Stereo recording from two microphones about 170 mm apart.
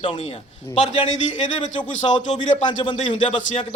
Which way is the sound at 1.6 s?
45° left (ahead or behind).